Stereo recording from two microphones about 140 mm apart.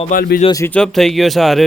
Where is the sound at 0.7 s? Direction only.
5° left (ahead or behind).